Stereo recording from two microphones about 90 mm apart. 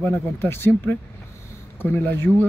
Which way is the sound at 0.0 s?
25° left (ahead or behind).